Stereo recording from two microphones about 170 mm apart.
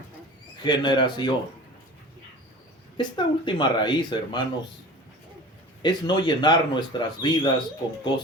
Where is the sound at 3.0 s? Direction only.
25° left (ahead or behind).